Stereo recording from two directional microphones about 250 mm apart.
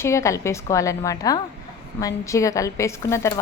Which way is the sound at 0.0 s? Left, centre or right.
Centre.